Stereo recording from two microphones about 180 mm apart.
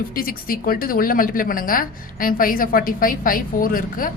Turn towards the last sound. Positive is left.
turn(degrees=50)  # may be behind; listen again after turning